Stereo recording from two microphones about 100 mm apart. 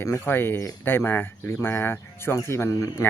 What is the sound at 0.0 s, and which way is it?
Speech, 25° left (ahead or behind).